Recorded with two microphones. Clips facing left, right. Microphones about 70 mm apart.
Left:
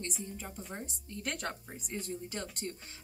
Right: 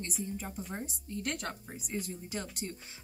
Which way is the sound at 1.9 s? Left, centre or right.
Centre.